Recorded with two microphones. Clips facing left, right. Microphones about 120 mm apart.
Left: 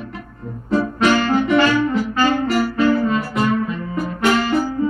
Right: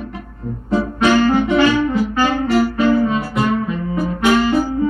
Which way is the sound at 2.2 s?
20° right (ahead or behind).